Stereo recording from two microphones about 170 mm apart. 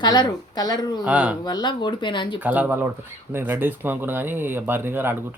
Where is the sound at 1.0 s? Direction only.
10° right (ahead or behind).